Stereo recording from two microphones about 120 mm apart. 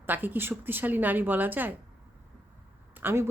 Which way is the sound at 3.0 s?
20° right (ahead or behind).